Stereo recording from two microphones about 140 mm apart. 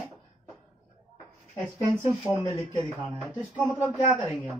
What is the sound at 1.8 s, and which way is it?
Speech, 20° right (ahead or behind).